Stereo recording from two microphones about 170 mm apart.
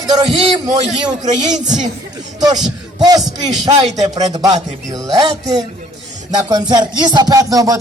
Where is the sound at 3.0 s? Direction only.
25° right (ahead or behind).